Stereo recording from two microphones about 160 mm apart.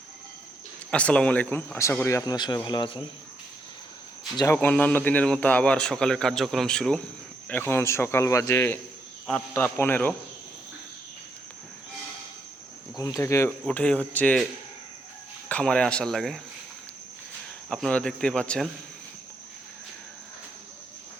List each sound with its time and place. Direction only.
0.9 s speech: 5° left (ahead or behind); by 3.0 s 30° left (ahead or behind)
4.5 s a man's voice: 10° left (ahead or behind)
13.0 s speech: 20° left (ahead or behind)
15.4 s a man's voice: 5° left (ahead or behind)
17.7 s a man's voice: 5° left (ahead or behind)